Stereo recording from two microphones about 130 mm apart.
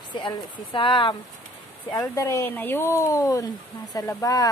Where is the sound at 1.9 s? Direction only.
25° left (ahead or behind).